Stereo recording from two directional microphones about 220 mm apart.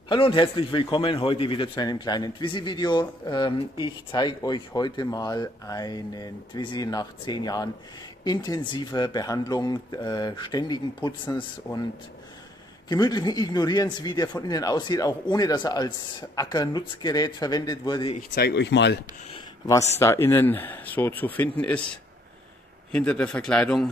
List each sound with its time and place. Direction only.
0.1 s a man's voice: 20° left (ahead or behind)
12.8 s a man's voice: 20° left (ahead or behind)
18.3 s speech: 45° left (ahead or behind)
19.3 s a sound: 15° left (ahead or behind)
20.0 s speech: 10° left (ahead or behind)
22.8 s a man's voice: 5° left (ahead or behind)